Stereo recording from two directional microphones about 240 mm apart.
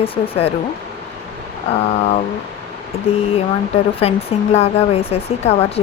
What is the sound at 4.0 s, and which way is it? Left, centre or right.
Speech, left.